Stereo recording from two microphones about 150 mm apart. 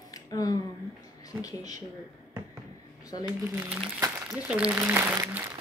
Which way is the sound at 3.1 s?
30° left (ahead or behind).